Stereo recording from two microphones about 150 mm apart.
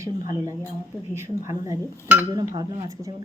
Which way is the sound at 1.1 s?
20° right (ahead or behind).